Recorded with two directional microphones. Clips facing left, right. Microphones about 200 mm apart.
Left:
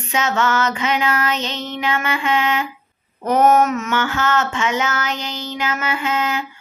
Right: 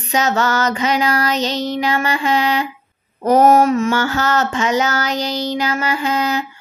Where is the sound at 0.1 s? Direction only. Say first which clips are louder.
Right 2 dB; 40° right (ahead or behind).